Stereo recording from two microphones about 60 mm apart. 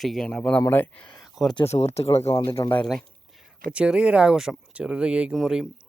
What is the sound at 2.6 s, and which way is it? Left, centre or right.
Speech, left.